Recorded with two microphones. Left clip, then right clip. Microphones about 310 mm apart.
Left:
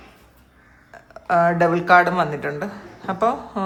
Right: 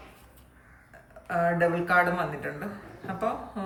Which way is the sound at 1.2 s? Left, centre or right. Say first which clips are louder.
Left 8 dB; centre.